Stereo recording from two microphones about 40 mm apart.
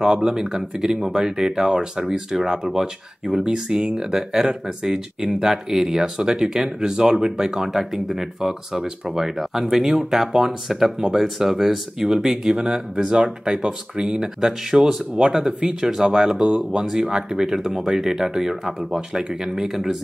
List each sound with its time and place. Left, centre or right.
0.0 s speech: centre
9.2 s speech: centre
15.2 s speech: right
15.8 s speech: centre